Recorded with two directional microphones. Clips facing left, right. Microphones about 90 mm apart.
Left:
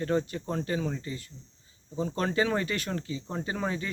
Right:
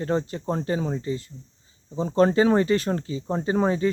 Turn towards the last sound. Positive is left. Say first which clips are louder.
# right 10 dB
turn(degrees=-30)  # may be behind; listen again after turning